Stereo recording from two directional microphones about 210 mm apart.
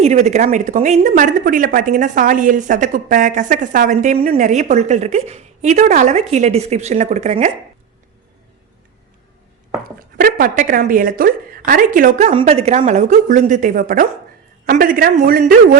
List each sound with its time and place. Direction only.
0.0 s speech: 30° right (ahead or behind)
10.2 s speech: 45° right (ahead or behind)